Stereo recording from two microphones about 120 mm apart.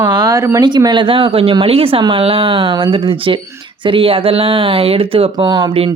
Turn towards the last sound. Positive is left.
turn(degrees=-35)  # may be behind; listen again after turning